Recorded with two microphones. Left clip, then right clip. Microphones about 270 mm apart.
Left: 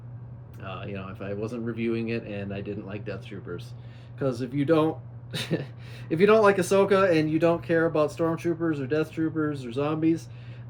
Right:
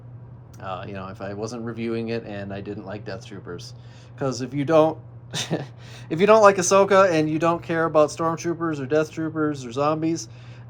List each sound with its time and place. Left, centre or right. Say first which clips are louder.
0.6 s speech: right 5 dB; centre